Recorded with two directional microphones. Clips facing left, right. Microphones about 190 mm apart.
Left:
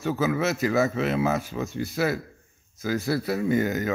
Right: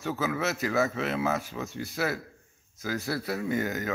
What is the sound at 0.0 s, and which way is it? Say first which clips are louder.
Speech: left 5 dB; 15° left (ahead or behind).